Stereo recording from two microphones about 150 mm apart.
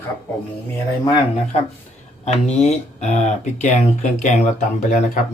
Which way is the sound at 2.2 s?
45° left (ahead or behind).